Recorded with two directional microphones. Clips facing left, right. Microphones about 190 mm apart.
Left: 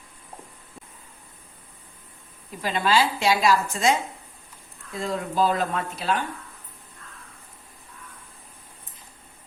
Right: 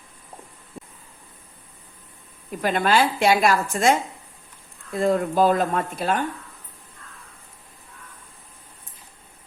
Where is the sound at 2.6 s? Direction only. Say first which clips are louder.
Right 2 dB; 55° right (ahead or behind).